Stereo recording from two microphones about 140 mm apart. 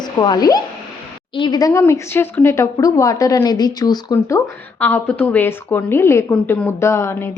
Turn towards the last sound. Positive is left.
turn(degrees=20)  # may be behind; listen again after turning